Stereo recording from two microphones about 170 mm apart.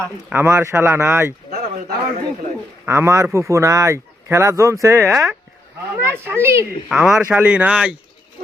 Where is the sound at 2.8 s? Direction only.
15° right (ahead or behind).